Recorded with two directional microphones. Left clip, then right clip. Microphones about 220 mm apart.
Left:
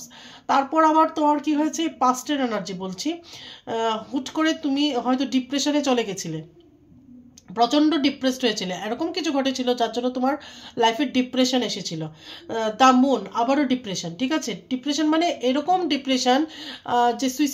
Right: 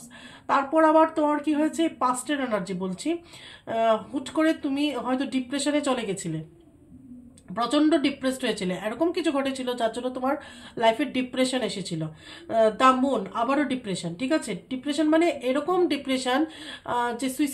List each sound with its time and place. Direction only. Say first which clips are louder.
0.5 s speech: left 2 dB; 35° left (ahead or behind)
7.5 s speech: left 3 dB; 30° left (ahead or behind)